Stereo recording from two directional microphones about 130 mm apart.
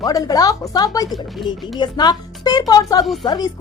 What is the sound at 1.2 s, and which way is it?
Speech, centre (ahead or behind).